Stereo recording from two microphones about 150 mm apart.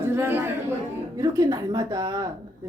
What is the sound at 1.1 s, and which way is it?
A woman's voice, 25° right (ahead or behind).